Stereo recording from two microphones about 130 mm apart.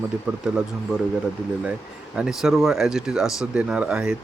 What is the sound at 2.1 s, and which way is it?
Speech, 5° right (ahead or behind).